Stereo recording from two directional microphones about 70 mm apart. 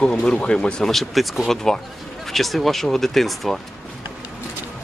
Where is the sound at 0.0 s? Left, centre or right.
Centre.